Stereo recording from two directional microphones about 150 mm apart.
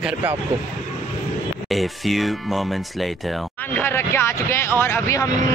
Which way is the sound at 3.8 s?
15° left (ahead or behind).